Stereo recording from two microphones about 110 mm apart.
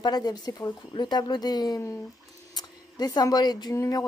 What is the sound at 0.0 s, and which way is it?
Speech, 40° left (ahead or behind).